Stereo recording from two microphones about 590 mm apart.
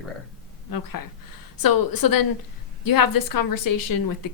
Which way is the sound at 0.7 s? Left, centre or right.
Left.